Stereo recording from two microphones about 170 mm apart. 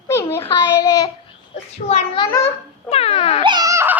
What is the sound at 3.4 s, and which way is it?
Baby cry, 25° right (ahead or behind).